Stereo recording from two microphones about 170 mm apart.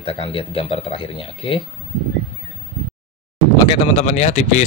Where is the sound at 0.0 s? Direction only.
30° left (ahead or behind).